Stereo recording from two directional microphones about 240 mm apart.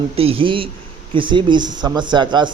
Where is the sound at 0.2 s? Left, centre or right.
Right.